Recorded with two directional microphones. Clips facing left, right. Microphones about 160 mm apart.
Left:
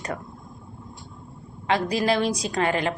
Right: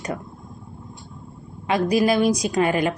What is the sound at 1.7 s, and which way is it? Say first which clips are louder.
Speech: right 4 dB; 30° left (ahead or behind).